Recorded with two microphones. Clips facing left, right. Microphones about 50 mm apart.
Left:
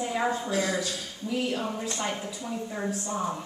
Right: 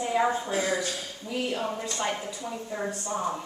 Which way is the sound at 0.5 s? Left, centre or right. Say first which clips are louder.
Even; right.